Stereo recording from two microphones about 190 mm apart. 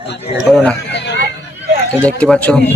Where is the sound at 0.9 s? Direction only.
65° left (ahead or behind).